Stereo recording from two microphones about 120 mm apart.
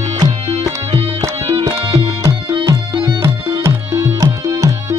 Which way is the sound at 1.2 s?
30° right (ahead or behind).